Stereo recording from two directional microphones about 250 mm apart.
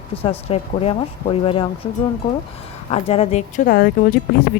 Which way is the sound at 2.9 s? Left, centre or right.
Left.